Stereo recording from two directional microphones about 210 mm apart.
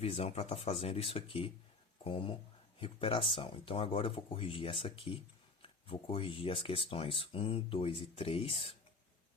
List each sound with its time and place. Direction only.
0.0 s speech: 30° left (ahead or behind)